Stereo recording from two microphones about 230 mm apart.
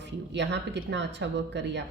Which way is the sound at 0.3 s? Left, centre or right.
Right.